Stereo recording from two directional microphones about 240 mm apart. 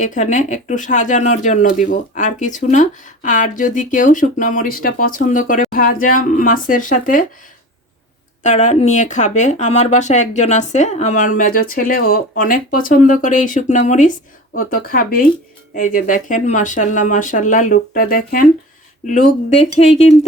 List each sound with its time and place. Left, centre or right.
0.0 s speech: left
8.4 s speech: left